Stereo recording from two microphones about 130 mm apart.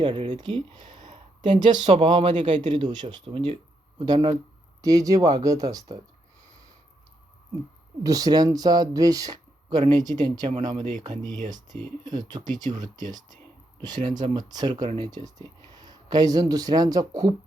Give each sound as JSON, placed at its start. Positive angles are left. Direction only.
{"t": 0.0, "sound": "speech", "side_deg": -35}
{"t": 1.8, "sound": "speech", "side_deg": -55}
{"t": 2.0, "sound": "speech", "side_deg": -35}
{"t": 8.0, "sound": "speech", "side_deg": -30}
{"t": 14.0, "sound": "speech", "side_deg": -75}
{"t": 14.3, "sound": "speech", "side_deg": -30}